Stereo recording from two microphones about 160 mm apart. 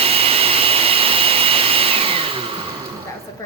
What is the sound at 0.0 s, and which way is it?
Vacuum cleaner, 35° right (ahead or behind).